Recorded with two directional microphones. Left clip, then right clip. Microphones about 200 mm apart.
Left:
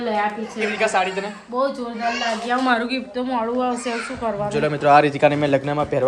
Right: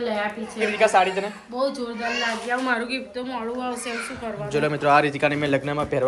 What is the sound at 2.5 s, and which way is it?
A woman's voice, 45° left (ahead or behind).